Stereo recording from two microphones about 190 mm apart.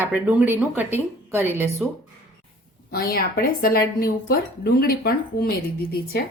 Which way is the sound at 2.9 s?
50° left (ahead or behind).